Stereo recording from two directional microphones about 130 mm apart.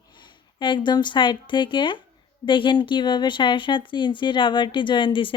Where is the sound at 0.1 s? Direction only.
35° left (ahead or behind).